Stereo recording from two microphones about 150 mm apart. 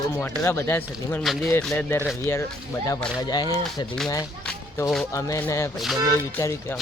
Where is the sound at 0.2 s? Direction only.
20° left (ahead or behind).